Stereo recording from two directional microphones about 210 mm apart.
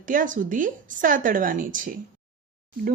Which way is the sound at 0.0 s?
40° right (ahead or behind).